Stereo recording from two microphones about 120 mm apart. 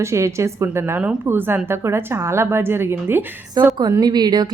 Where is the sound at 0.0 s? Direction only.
25° right (ahead or behind).